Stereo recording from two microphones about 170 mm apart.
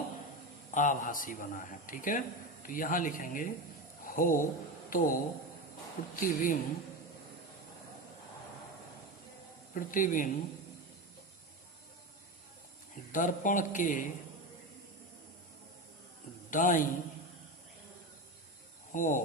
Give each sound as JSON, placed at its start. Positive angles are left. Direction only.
{"t": 0.7, "sound": "a man's voice", "side_deg": 50}
{"t": 9.7, "sound": "a man's voice", "side_deg": 55}
{"t": 13.1, "sound": "a man's voice", "side_deg": 50}
{"t": 16.5, "sound": "a man's voice", "side_deg": 50}
{"t": 18.9, "sound": "speech", "side_deg": 50}